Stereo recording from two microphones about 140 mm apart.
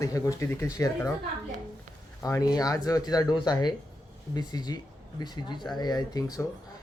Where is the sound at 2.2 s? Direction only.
25° left (ahead or behind).